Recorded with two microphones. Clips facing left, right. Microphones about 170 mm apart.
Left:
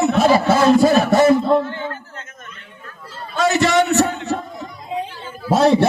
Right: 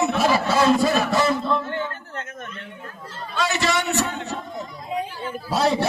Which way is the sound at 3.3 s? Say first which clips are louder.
Left 8 dB; 45° left (ahead or behind).